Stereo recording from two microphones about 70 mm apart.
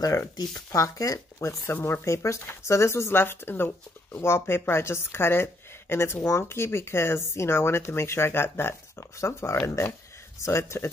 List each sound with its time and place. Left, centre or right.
0.7 s speech: left
1.6 s speech: left